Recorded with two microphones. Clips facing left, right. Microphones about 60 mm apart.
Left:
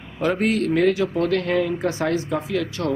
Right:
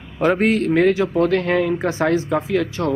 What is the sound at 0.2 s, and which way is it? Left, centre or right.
Speech, right.